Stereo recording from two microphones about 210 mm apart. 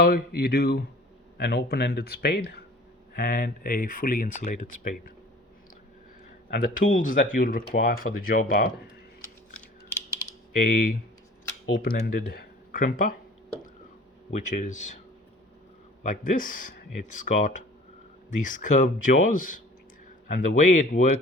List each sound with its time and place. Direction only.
0.0 s speech: 45° left (ahead or behind)
6.5 s speech: 40° left (ahead or behind)
10.6 s speech: 40° left (ahead or behind)
14.3 s speech: 35° left (ahead or behind)
16.0 s speech: 40° left (ahead or behind)